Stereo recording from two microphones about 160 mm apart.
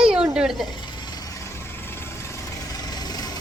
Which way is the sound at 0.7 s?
30° left (ahead or behind).